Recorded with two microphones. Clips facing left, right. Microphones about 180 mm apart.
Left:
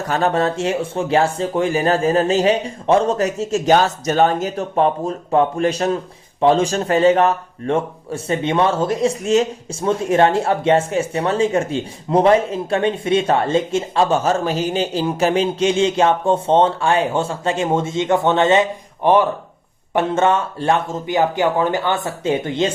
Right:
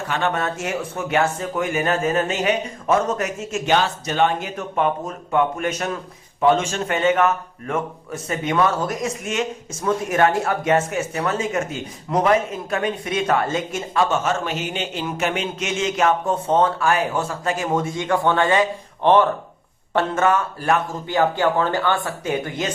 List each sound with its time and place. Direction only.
0.1 s a man's voice: 35° left (ahead or behind)
19.0 s speech: 10° left (ahead or behind)
20.1 s a man's voice: 25° left (ahead or behind)